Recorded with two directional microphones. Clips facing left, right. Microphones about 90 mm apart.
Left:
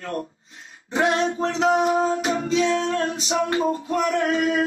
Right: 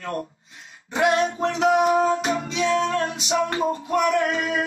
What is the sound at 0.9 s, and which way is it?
Music, 35° left (ahead or behind).